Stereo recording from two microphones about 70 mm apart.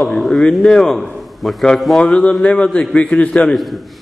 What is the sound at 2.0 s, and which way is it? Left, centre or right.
A man's voice, centre.